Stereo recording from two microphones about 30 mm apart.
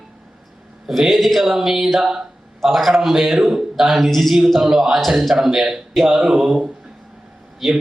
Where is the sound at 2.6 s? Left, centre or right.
Centre.